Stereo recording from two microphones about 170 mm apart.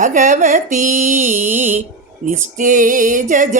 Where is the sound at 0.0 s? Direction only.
50° right (ahead or behind).